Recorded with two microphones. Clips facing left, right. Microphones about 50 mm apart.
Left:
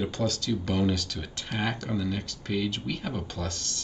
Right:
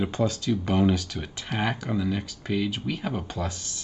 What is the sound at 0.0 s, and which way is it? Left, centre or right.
Speech, right.